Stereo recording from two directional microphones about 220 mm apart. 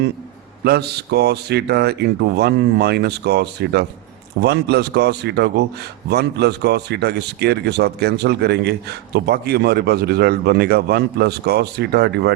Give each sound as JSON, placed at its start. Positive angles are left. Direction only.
{"t": 0.6, "sound": "a man's voice", "side_deg": -45}